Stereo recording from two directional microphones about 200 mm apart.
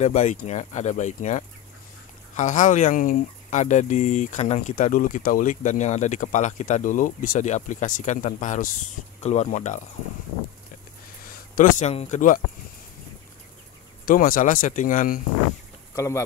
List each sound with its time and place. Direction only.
0.0 s speech: 35° left (ahead or behind)
11.5 s speech: 40° left (ahead or behind)
14.0 s speech: 45° left (ahead or behind)
15.9 s speech: 15° left (ahead or behind)